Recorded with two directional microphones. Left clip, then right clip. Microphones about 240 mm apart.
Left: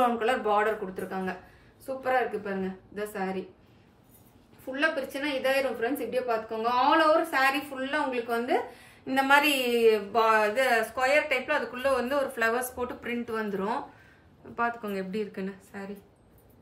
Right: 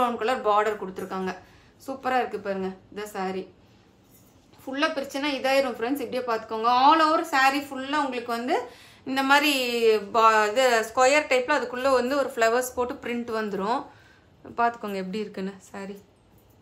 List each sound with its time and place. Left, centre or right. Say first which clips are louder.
0.0 s speech: right 1 dB; centre
4.7 s speech: right 2 dB; centre
11.0 s speech: right 5 dB; centre